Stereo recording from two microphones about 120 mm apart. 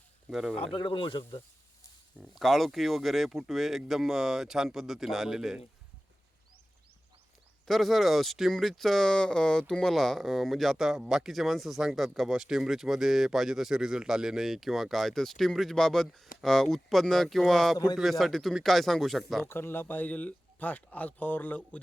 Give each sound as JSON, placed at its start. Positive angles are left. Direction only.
{"t": 0.3, "sound": "speech", "side_deg": -5}
{"t": 0.5, "sound": "speech", "side_deg": 50}
{"t": 2.3, "sound": "speech", "side_deg": 0}
{"t": 7.7, "sound": "speech", "side_deg": 0}
{"t": 19.5, "sound": "speech", "side_deg": 20}